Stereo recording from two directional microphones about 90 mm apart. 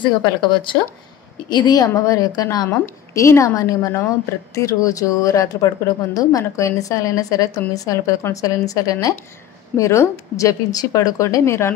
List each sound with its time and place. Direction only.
0.0 s speech: 60° left (ahead or behind)
1.5 s a woman's voice: 50° left (ahead or behind)
11.2 s a woman's voice: 30° left (ahead or behind)